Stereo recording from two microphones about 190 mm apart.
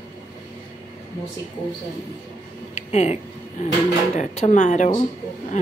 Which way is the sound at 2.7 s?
35° left (ahead or behind).